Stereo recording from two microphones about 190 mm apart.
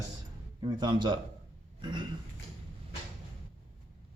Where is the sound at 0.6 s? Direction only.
25° right (ahead or behind).